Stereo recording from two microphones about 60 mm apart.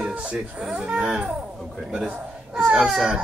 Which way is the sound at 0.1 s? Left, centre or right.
Centre.